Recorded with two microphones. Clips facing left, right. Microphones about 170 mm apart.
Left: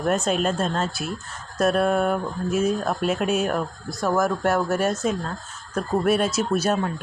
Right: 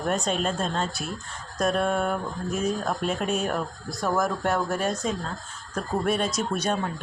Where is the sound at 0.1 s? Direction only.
5° left (ahead or behind).